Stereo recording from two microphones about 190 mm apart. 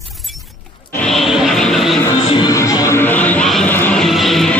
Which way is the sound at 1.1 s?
Centre (ahead or behind).